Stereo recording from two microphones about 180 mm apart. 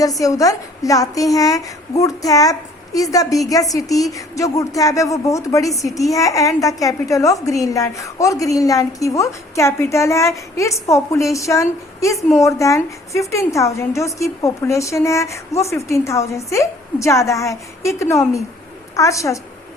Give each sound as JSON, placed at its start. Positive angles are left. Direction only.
{"t": 0.2, "sound": "a woman's voice", "side_deg": 20}